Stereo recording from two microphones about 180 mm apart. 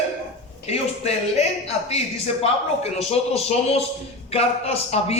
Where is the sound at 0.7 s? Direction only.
35° left (ahead or behind).